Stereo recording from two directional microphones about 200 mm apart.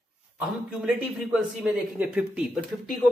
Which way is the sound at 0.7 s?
5° right (ahead or behind).